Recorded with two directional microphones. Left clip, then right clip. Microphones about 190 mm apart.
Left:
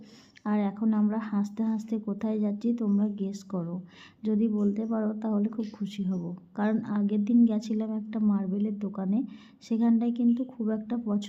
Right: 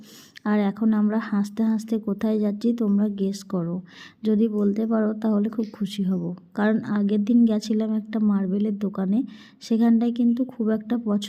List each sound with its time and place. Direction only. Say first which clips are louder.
0.4 s speech: right 6 dB; 25° right (ahead or behind)